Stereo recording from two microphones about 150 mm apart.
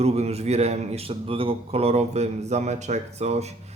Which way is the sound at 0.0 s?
45° right (ahead or behind).